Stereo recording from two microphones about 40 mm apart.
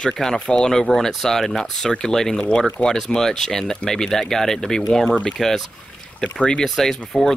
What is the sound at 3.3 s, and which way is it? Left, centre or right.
Speech, centre.